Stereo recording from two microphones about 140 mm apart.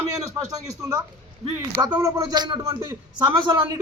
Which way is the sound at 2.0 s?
30° right (ahead or behind).